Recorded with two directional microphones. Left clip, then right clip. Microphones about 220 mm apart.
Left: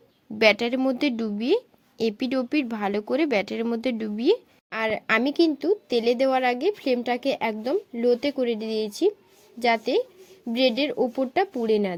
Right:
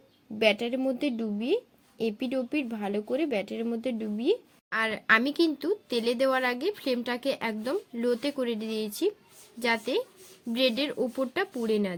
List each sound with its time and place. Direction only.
0.3 s a woman's voice: 50° left (ahead or behind)
4.7 s speech: 20° left (ahead or behind)